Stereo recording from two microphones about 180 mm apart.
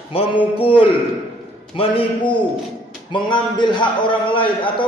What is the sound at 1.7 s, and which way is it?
A man's voice, 25° left (ahead or behind).